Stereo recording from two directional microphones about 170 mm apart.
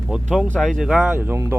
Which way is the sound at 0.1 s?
Centre (ahead or behind).